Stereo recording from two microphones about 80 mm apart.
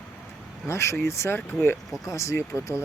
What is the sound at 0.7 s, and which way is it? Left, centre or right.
Speech, left.